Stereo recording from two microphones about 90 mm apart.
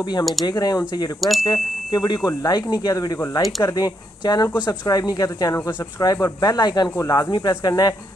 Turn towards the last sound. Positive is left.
turn(degrees=50)  # may be behind; listen again after turning